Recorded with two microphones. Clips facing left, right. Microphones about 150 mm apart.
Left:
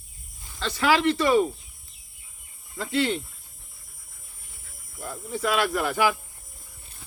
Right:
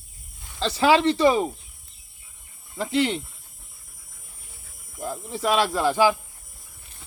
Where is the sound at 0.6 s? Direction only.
30° right (ahead or behind).